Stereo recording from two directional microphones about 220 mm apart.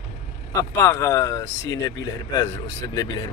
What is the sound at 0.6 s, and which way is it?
Speech, 15° left (ahead or behind).